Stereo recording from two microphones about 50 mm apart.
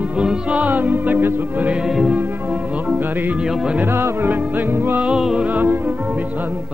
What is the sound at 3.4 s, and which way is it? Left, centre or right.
Music, centre.